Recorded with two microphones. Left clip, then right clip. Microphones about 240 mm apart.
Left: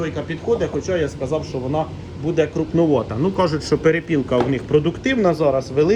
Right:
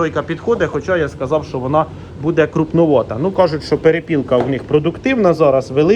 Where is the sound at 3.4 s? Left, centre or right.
Right.